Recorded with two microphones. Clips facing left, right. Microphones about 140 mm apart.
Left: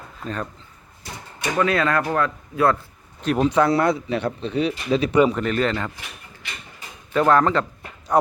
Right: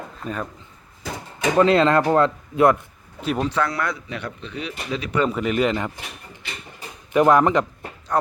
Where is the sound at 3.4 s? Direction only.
15° left (ahead or behind).